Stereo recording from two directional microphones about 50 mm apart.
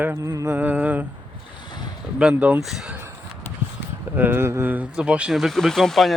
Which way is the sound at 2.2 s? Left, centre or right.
Centre.